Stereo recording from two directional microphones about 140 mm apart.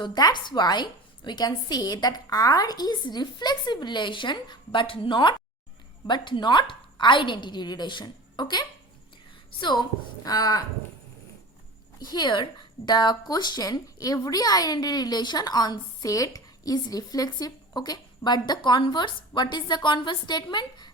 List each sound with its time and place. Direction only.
0.0 s a woman's voice: 30° left (ahead or behind)
11.9 s a woman's voice: 30° left (ahead or behind)